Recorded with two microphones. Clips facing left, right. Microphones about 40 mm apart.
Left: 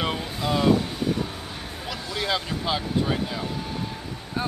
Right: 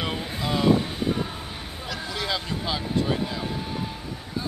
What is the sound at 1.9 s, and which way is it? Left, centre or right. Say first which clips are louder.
Speech: left 2 dB; centre.